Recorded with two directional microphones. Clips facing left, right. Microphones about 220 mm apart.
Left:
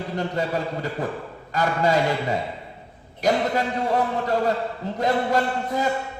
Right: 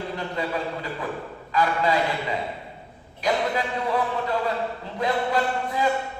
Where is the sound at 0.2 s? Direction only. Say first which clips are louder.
Left 5 dB; 45° left (ahead or behind).